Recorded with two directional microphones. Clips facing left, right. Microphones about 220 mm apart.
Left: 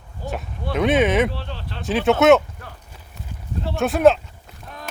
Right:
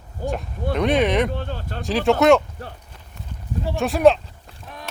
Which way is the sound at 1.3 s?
45° right (ahead or behind).